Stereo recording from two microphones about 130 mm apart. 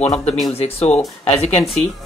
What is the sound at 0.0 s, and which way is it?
Speech, 55° left (ahead or behind).